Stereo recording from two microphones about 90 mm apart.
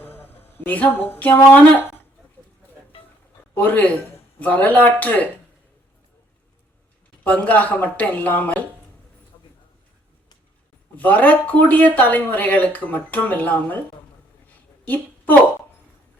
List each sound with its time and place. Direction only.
0.0 s a sound: 25° left (ahead or behind)
1.5 s speech: 15° left (ahead or behind)
3.6 s speech: 15° left (ahead or behind)
7.3 s speech: 15° left (ahead or behind)
10.9 s speech: 20° left (ahead or behind)
14.8 s a woman's voice: 20° left (ahead or behind)